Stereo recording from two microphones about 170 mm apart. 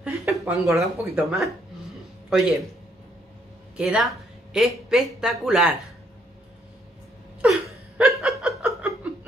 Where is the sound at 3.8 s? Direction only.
5° right (ahead or behind).